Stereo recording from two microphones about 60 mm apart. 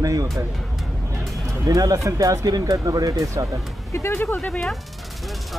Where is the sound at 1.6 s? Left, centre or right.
Right.